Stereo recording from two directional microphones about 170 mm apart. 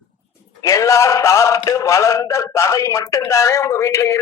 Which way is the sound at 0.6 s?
15° left (ahead or behind).